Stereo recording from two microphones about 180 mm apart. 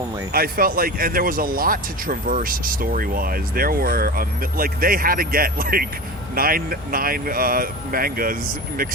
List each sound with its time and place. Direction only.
0.3 s speech: 55° right (ahead or behind)